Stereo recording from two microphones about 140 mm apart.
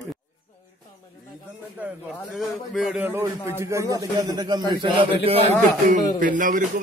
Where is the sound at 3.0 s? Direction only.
15° right (ahead or behind); by 5.4 s 40° right (ahead or behind).